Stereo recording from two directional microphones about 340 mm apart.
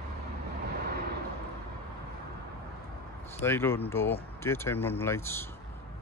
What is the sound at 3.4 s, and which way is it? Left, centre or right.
Speech, centre.